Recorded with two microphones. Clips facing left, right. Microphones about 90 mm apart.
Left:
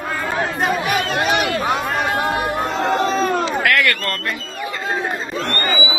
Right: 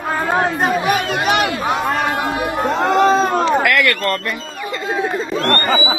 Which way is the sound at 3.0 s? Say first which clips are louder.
Right 5 dB; 50° right (ahead or behind).